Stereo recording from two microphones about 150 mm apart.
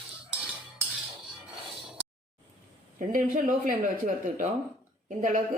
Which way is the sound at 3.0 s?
65° right (ahead or behind).